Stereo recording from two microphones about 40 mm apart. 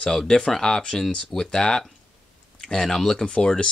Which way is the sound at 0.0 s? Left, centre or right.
Centre.